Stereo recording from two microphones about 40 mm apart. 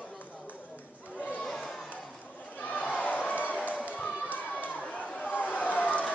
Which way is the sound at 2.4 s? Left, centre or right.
Left.